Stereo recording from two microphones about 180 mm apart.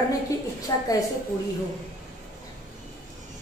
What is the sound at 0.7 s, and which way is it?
Speech, 20° left (ahead or behind).